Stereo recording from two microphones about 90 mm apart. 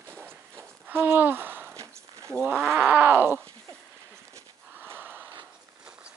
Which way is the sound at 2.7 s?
15° right (ahead or behind).